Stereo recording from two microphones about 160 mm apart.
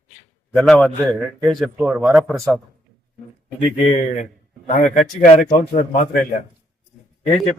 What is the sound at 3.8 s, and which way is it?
A man's voice, 40° left (ahead or behind).